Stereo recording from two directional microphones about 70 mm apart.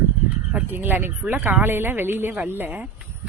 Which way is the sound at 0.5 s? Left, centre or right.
Right.